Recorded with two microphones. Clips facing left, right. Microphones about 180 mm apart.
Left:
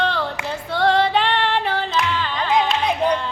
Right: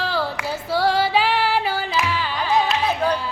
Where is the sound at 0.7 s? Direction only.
5° right (ahead or behind).